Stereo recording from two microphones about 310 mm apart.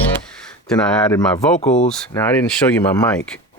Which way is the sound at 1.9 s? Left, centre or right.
Centre.